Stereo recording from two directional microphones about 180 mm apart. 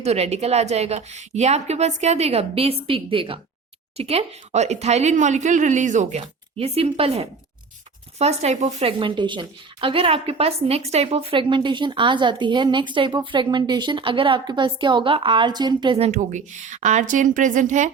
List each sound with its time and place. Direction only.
0.0 s a woman's voice: 35° right (ahead or behind)